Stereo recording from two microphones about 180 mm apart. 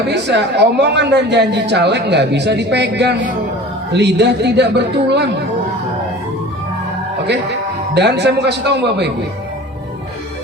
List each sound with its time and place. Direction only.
0.1 s a man's voice: 75° right (ahead or behind)
7.9 s a man's voice: 70° right (ahead or behind)